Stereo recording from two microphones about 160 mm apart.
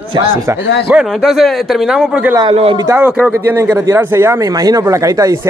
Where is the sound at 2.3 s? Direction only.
35° right (ahead or behind).